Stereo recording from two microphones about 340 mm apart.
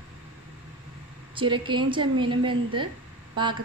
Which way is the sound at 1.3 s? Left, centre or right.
Centre.